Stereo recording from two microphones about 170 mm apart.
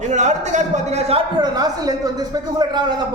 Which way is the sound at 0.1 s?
45° right (ahead or behind).